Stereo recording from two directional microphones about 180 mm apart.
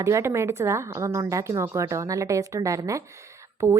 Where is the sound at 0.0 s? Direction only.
15° right (ahead or behind).